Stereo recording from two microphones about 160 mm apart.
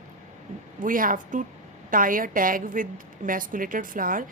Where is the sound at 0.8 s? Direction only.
60° right (ahead or behind).